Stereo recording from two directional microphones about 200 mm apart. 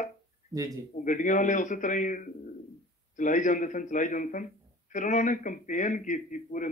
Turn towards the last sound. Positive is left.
turn(degrees=40)  # may be behind; listen again after turning